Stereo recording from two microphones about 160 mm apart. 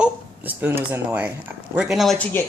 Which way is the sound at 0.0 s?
10° right (ahead or behind).